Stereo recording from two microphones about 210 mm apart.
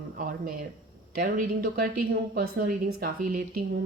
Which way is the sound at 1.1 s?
45° right (ahead or behind).